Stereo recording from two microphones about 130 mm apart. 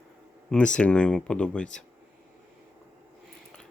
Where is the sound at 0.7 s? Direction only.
10° left (ahead or behind).